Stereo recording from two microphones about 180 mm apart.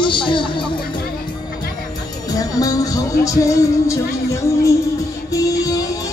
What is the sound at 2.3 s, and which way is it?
Music, 20° left (ahead or behind).